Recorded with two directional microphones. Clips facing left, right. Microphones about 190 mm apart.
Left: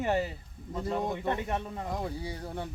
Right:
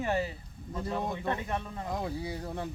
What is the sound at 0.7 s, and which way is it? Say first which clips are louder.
Speech: left 2 dB; 15° left (ahead or behind).